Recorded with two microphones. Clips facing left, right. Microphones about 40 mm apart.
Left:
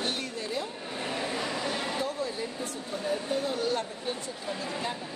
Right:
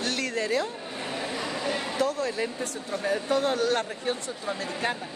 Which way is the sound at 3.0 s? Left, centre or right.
Right.